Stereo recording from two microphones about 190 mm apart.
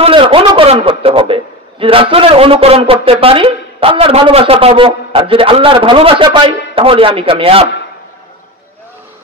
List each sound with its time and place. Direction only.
0.0 s a man's voice: 25° right (ahead or behind)